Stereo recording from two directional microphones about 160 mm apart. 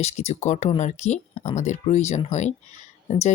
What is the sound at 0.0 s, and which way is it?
Speech, 40° left (ahead or behind).